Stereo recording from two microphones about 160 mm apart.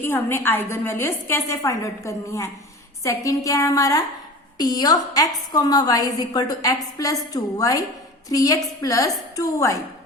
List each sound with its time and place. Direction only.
0.0 s a woman's voice: 15° left (ahead or behind)